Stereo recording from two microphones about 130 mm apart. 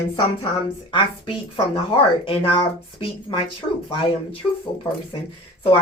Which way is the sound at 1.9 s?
45° left (ahead or behind).